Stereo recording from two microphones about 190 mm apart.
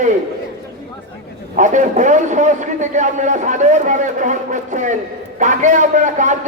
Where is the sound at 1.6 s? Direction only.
40° right (ahead or behind).